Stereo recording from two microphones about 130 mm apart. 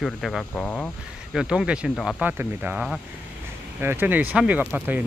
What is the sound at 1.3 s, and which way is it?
Speech, 5° right (ahead or behind).